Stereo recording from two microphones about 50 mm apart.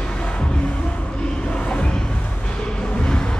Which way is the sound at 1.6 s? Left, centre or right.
Left.